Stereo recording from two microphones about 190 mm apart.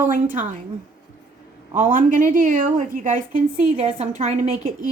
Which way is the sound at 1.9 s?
45° right (ahead or behind).